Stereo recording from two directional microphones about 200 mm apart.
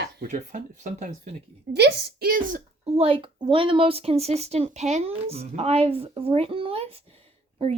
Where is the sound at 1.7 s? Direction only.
55° right (ahead or behind).